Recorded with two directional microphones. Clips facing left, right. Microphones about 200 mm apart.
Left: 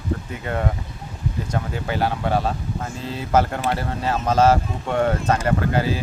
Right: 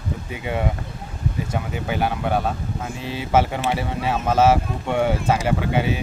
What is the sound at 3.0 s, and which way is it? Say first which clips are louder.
Speech: even; 75° right (ahead or behind).